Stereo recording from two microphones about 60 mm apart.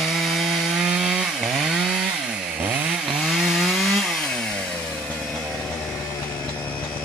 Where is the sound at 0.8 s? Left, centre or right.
Centre.